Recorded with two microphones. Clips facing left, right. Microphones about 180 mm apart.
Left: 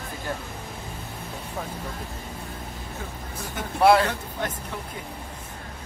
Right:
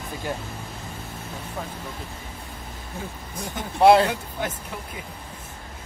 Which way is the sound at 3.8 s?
25° right (ahead or behind).